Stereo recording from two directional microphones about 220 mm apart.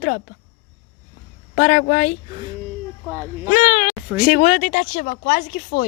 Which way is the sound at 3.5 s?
35° left (ahead or behind).